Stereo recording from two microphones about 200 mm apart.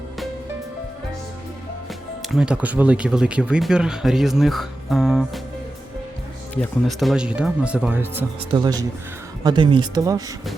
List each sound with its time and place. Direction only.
2.3 s speech: 5° right (ahead or behind)
6.5 s speech: 5° left (ahead or behind); by 10.2 s 20° right (ahead or behind)